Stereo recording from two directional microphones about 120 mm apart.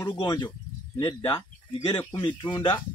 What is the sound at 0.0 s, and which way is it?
Speech, 35° left (ahead or behind).